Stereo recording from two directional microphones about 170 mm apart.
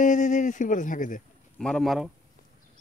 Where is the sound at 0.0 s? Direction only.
45° left (ahead or behind).